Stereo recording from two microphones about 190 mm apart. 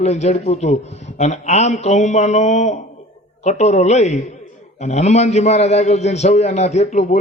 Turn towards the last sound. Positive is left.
turn(degrees=35)  # may be behind; listen again after turning